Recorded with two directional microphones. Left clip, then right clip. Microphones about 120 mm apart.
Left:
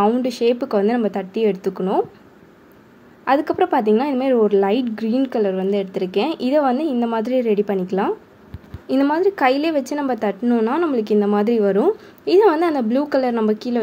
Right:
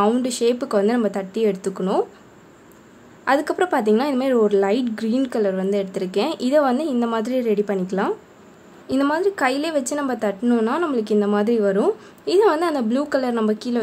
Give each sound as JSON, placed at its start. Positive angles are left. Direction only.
{"t": 0.0, "sound": "a woman's voice", "side_deg": 5}
{"t": 3.3, "sound": "a woman's voice", "side_deg": 10}